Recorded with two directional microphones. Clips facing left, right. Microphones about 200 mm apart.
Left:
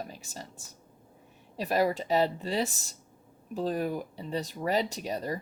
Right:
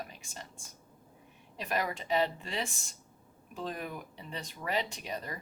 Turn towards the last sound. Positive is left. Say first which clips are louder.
# left 7 dB
turn(degrees=40)  # may be behind; listen again after turning